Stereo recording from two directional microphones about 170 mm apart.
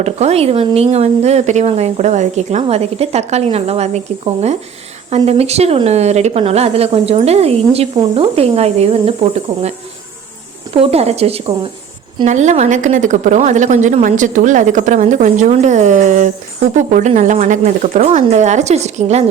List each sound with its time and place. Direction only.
0.0 s speech: 40° right (ahead or behind)
10.8 s a woman's voice: 40° right (ahead or behind)